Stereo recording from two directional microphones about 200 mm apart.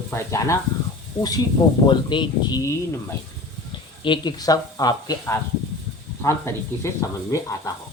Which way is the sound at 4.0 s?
20° left (ahead or behind).